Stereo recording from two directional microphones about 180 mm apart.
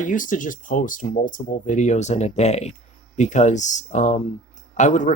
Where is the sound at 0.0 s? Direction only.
45° left (ahead or behind).